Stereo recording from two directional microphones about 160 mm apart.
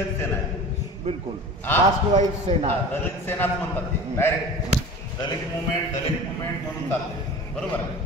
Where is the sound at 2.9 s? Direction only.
15° left (ahead or behind).